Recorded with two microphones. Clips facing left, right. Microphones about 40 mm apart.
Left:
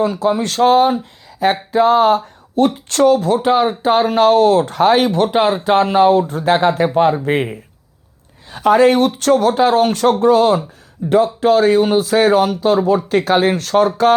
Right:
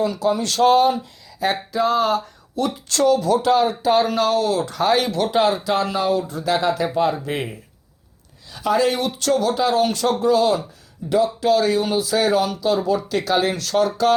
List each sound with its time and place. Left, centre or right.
0.0 s speech: left